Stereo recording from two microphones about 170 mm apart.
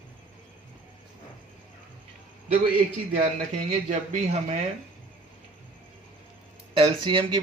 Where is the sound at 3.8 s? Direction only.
40° right (ahead or behind).